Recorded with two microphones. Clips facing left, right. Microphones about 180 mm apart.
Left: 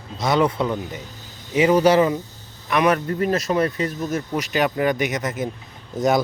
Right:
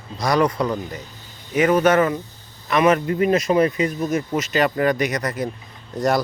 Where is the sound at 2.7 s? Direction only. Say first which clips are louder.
Right 2 dB; 5° right (ahead or behind).